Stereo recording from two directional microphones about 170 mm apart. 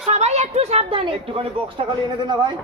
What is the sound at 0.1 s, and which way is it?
A woman's voice, 40° right (ahead or behind).